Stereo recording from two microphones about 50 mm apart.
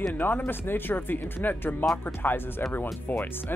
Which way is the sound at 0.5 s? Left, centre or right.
Left.